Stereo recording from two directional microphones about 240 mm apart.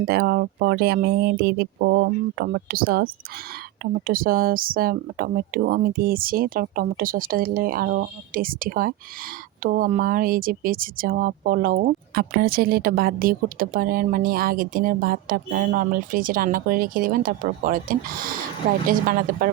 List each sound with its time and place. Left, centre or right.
0.0 s speech: right